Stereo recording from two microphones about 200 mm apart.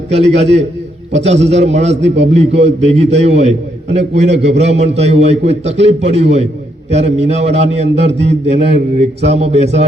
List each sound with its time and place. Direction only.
0.1 s a man's voice: 30° right (ahead or behind)
2.0 s a man's voice: 60° right (ahead or behind)
2.3 s a man's voice: 35° right (ahead or behind)